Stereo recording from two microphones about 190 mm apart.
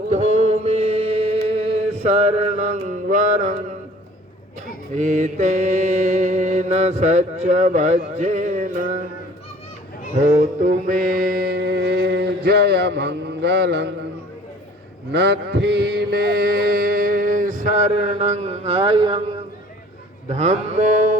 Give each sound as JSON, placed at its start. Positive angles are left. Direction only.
{"t": 0.1, "sound": "chant", "side_deg": -35}
{"t": 4.9, "sound": "mantra", "side_deg": -40}
{"t": 10.2, "sound": "mantra", "side_deg": -40}
{"t": 15.1, "sound": "mantra", "side_deg": -65}